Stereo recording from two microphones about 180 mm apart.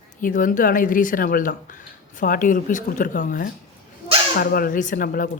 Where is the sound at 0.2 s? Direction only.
50° left (ahead or behind).